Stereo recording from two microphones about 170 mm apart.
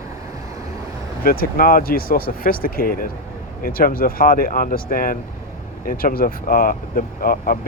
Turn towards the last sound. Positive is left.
turn(degrees=60)  # may be behind; listen again after turning